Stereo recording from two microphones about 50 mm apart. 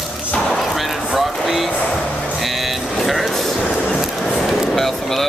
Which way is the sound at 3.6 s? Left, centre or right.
Left.